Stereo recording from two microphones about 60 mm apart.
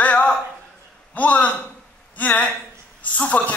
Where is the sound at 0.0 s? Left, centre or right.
Left.